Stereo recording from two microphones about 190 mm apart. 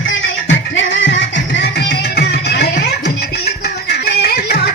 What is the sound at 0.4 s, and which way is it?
Music, 75° left (ahead or behind).